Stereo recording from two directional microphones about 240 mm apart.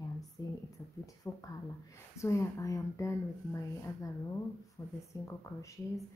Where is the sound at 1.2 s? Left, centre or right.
Centre.